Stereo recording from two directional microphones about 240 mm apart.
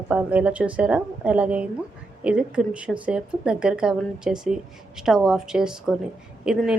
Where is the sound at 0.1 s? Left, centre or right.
Centre.